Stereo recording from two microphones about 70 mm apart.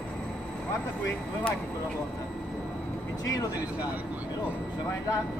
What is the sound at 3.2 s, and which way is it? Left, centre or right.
Speech, left.